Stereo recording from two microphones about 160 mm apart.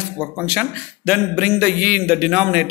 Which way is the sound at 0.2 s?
5° right (ahead or behind).